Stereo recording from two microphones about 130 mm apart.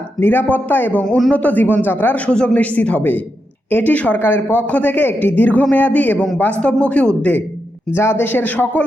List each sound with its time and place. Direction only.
0.2 s a man's voice: 15° left (ahead or behind)